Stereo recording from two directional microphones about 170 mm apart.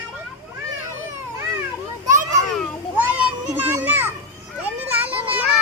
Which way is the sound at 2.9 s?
10° right (ahead or behind).